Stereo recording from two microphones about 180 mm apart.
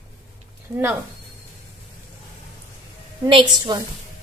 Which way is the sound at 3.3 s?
30° right (ahead or behind).